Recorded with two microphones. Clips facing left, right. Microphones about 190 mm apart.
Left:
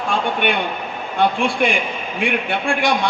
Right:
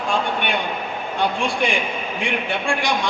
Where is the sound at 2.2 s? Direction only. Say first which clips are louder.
Left 4 dB; 60° left (ahead or behind).